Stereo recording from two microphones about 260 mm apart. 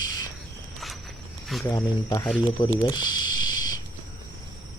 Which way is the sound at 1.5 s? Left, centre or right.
Centre.